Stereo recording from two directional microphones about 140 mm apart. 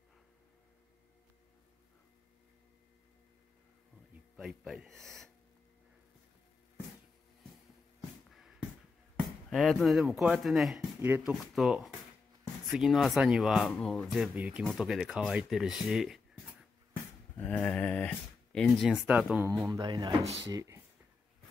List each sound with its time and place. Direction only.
4.4 s speech: 5° right (ahead or behind)
8.3 s a sound: centre (ahead or behind)
9.5 s speech: centre (ahead or behind)
11.0 s speech: 15° right (ahead or behind)
11.3 s speech: centre (ahead or behind)
17.4 s speech: 10° left (ahead or behind); by 19.8 s 20° right (ahead or behind)
19.8 s speech: 30° right (ahead or behind)